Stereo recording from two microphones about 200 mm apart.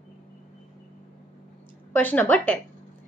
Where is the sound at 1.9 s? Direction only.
10° left (ahead or behind).